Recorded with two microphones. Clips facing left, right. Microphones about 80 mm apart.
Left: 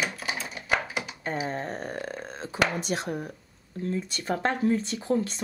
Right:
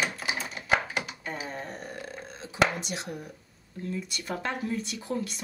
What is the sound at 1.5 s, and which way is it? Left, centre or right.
Speech, left.